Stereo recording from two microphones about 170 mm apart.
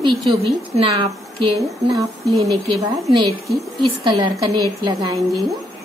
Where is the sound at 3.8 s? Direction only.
25° right (ahead or behind).